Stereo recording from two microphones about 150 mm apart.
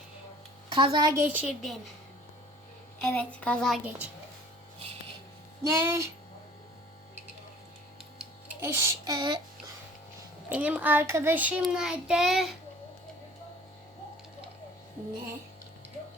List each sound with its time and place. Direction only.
0.7 s speech: 35° right (ahead or behind)
1.2 s speech: 10° right (ahead or behind)
3.0 s child singing: 5° left (ahead or behind)
3.8 s speech: 10° right (ahead or behind)
5.6 s child singing: 20° right (ahead or behind)
8.6 s child singing: 20° right (ahead or behind)
10.5 s speech: 10° right (ahead or behind)
11.6 s child singing: 5° right (ahead or behind)